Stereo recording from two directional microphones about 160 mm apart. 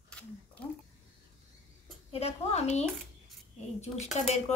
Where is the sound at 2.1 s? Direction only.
40° left (ahead or behind).